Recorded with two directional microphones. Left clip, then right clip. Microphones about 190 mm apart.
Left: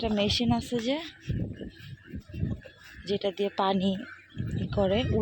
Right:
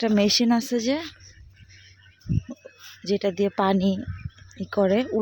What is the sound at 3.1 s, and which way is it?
Speech, 30° right (ahead or behind).